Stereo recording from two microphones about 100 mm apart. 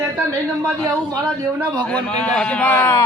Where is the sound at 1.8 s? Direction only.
10° left (ahead or behind).